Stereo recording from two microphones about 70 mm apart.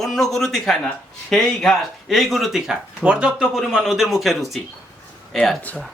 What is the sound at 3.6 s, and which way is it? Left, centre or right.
Speech, centre.